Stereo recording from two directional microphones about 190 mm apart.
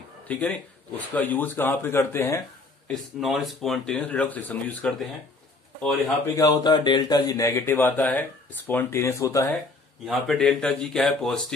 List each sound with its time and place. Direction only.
0.3 s speech: 5° left (ahead or behind)
2.9 s speech: centre (ahead or behind)
6.3 s speech: 20° left (ahead or behind)
10.0 s speech: centre (ahead or behind)